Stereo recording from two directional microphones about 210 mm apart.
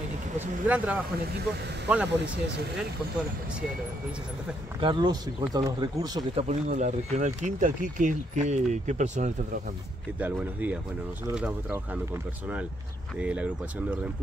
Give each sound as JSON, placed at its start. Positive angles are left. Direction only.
{"t": 0.7, "sound": "speech", "side_deg": -5}
{"t": 4.7, "sound": "speech", "side_deg": -20}
{"t": 6.4, "sound": "speech", "side_deg": -35}
{"t": 10.1, "sound": "speech", "side_deg": -5}